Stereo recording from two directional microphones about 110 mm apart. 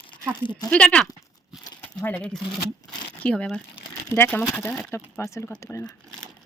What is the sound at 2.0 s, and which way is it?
Speech, 15° left (ahead or behind).